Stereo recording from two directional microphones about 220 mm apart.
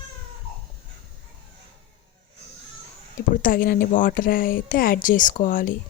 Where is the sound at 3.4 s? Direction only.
40° left (ahead or behind).